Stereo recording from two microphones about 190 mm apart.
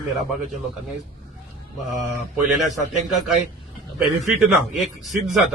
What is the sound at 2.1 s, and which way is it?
Speech, centre (ahead or behind).